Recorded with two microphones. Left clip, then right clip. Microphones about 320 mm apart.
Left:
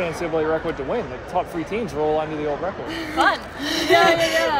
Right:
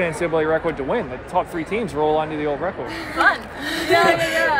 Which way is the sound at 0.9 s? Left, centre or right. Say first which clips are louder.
Right 2 dB; right.